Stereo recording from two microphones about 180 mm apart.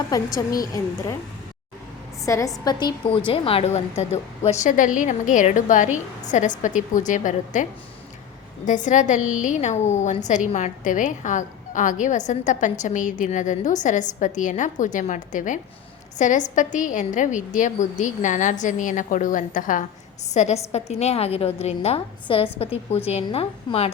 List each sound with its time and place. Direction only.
0.3 s a woman's voice: 20° left (ahead or behind)
2.2 s a woman's voice: 20° left (ahead or behind)